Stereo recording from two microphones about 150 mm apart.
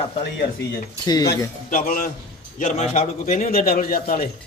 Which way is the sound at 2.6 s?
50° left (ahead or behind).